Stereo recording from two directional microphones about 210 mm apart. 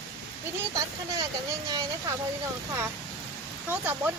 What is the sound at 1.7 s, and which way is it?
Speech, 20° right (ahead or behind).